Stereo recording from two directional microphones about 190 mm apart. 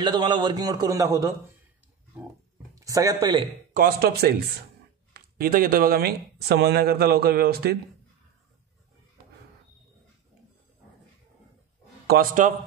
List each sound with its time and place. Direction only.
0.0 s a man's voice: 25° right (ahead or behind)
2.7 s speech: 15° right (ahead or behind)
3.7 s speech: 50° right (ahead or behind)
12.1 s speech: 45° right (ahead or behind)